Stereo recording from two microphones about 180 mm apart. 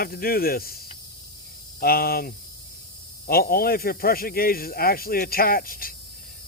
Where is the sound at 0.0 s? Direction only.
55° left (ahead or behind).